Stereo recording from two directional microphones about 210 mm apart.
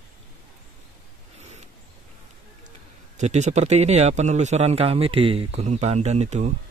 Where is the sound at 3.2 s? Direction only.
35° right (ahead or behind).